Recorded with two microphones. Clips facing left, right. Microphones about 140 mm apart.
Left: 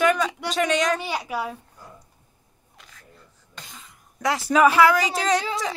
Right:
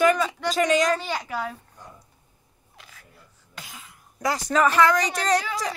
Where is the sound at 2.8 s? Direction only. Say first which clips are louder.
Right 1 dB; 5° right (ahead or behind).